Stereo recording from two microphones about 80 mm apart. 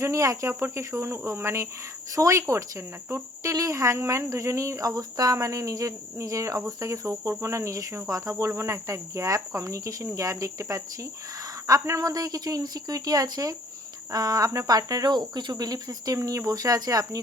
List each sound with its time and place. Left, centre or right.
0.0 s cricket: right
3.4 s speech: right
6.7 s cricket: right
11.6 s speech: right
15.1 s speech: right